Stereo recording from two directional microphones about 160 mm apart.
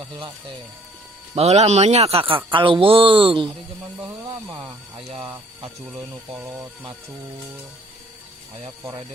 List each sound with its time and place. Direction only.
0.0 s speech: 30° right (ahead or behind)
1.4 s speech: 40° right (ahead or behind)
4.9 s speech: 40° right (ahead or behind)
5.2 s speech: 10° right (ahead or behind)